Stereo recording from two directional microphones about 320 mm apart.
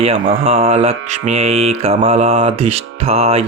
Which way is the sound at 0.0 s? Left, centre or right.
Centre.